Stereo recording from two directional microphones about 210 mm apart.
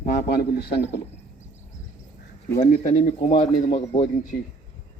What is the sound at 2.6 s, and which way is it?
Speech, 35° left (ahead or behind).